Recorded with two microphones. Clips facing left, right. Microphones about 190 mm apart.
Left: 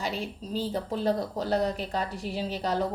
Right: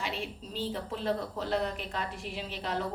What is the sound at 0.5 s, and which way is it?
Speech, 40° left (ahead or behind).